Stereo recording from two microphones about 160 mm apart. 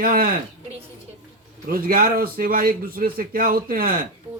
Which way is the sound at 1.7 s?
65° right (ahead or behind).